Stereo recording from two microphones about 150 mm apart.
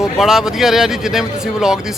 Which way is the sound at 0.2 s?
Centre (ahead or behind).